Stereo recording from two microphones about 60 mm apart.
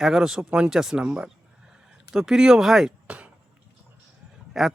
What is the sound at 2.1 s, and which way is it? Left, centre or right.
Speech, centre.